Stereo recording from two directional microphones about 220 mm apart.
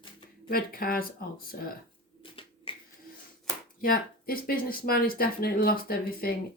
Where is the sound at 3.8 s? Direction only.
40° left (ahead or behind).